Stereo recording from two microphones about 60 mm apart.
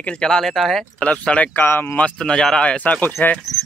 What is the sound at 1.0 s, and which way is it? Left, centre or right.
Speech, centre.